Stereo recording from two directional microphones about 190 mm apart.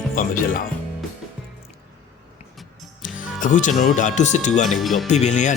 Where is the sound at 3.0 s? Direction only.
40° left (ahead or behind).